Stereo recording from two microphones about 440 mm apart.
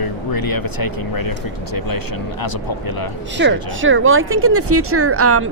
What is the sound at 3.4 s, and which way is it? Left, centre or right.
Speech, right.